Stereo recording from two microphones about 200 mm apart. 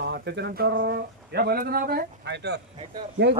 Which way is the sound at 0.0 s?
55° right (ahead or behind).